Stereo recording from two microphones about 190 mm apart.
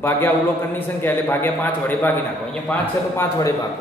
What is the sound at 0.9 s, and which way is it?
A man's voice, 10° left (ahead or behind).